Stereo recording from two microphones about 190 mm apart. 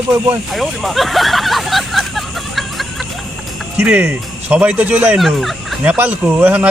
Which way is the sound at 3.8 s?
10° right (ahead or behind).